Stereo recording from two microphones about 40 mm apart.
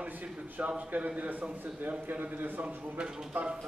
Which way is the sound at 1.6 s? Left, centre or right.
Right.